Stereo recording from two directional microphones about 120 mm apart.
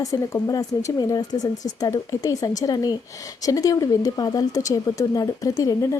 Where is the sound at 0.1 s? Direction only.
30° left (ahead or behind).